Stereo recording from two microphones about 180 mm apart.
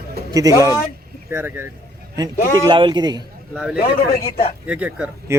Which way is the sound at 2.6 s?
25° right (ahead or behind).